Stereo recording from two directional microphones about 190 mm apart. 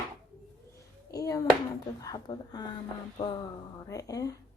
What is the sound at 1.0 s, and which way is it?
Speech, 20° left (ahead or behind).